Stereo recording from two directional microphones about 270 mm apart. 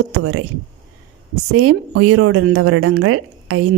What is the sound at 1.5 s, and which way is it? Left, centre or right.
A woman's voice, right.